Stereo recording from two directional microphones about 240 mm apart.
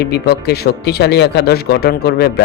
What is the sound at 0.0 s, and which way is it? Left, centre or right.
Speech, left.